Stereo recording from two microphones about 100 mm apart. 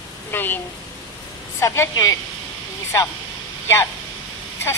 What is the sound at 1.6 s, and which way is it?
Speech, 30° left (ahead or behind).